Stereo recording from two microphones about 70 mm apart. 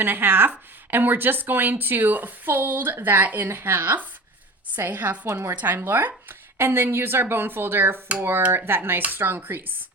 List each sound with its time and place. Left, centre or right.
0.0 s a woman's voice: right
5.3 s a woman's voice: right
5.5 s a woman's voice: right